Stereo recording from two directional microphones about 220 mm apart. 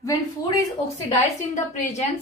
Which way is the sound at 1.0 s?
30° left (ahead or behind).